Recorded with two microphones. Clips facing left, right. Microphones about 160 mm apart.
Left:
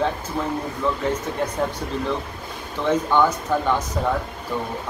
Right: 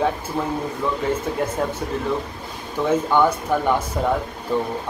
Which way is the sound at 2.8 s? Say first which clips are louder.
Right 1 dB; 10° right (ahead or behind).